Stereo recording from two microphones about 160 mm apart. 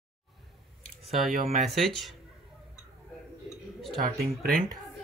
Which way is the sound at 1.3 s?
55° right (ahead or behind).